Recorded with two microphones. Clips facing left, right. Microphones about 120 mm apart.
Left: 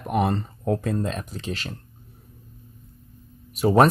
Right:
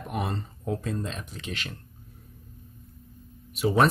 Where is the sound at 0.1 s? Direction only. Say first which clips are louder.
Left 9 dB; 60° left (ahead or behind).